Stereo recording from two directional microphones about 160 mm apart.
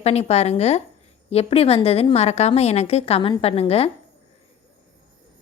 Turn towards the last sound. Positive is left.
turn(degrees=40)  # may be behind; listen again after turning